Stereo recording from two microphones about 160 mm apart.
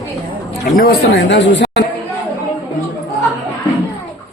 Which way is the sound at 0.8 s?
80° left.